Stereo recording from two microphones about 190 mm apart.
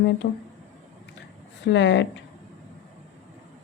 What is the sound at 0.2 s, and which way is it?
Speech, 65° left (ahead or behind).